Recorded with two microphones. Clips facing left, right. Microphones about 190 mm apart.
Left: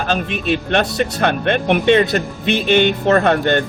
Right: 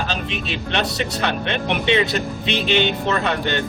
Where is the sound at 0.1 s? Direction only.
50° left (ahead or behind).